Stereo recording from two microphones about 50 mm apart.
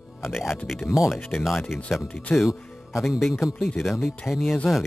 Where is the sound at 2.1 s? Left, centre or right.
Left.